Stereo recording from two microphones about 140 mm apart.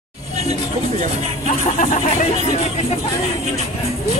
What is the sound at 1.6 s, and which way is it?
Speech, 60° left (ahead or behind).